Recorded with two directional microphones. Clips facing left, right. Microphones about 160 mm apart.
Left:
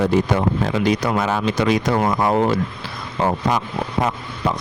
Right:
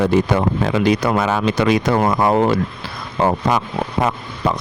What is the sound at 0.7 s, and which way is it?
Speech, 65° right (ahead or behind).